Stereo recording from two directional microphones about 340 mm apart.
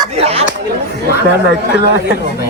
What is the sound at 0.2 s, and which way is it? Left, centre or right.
Speech, centre.